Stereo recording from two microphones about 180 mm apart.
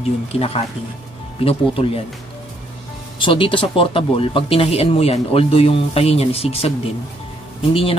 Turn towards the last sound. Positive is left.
turn(degrees=30)  # may be behind; listen again after turning